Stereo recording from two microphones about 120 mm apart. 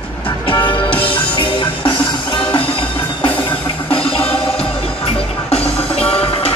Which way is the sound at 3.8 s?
50° left (ahead or behind).